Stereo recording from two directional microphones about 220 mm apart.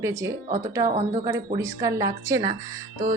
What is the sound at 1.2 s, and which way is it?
Speech, 15° right (ahead or behind).